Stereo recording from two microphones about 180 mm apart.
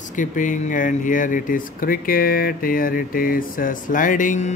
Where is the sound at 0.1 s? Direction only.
45° left (ahead or behind).